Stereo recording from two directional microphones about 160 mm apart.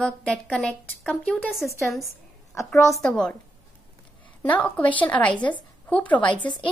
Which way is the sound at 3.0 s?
5° left (ahead or behind).